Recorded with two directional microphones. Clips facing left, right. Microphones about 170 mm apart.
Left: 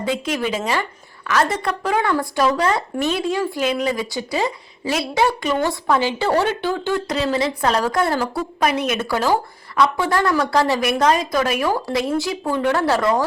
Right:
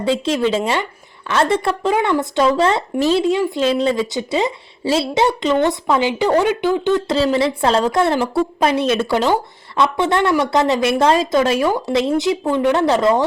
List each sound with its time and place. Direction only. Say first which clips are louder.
0.1 s speech: right 6 dB; 25° right (ahead or behind)